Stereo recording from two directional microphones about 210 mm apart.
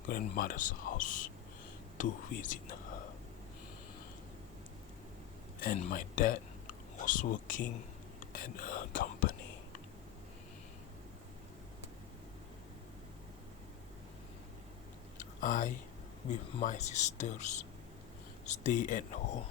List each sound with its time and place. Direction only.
0.1 s speech: 40° left (ahead or behind)
5.5 s speech: 40° left (ahead or behind)
15.2 s chewing: 40° left (ahead or behind)
16.3 s speech: 35° left (ahead or behind)